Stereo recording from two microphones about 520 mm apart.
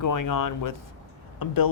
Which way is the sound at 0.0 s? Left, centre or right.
Left.